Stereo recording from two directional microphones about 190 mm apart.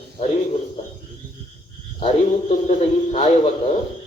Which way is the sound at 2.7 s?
35° left (ahead or behind).